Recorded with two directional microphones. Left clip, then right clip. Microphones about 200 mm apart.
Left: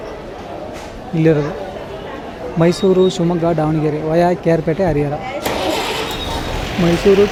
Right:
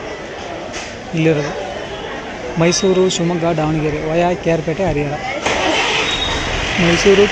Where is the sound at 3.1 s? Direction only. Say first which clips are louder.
Even; 20° left (ahead or behind).